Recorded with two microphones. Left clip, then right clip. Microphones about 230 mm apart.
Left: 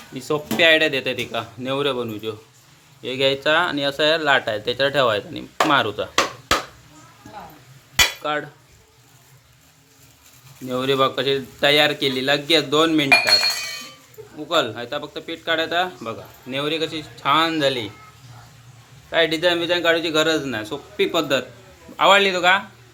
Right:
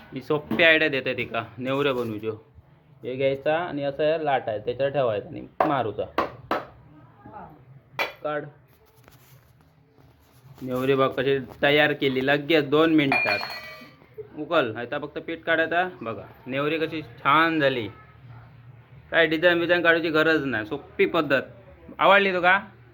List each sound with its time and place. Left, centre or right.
0.1 s speech: centre
8.2 s cutlery: centre
10.7 s speech: centre
19.1 s speech: centre